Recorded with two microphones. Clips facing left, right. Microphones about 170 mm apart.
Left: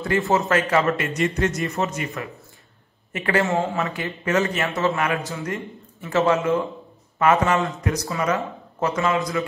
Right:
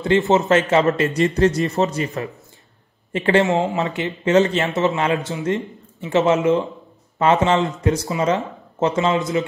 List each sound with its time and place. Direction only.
0.0 s a man's voice: 20° right (ahead or behind)
3.1 s speech: 30° right (ahead or behind)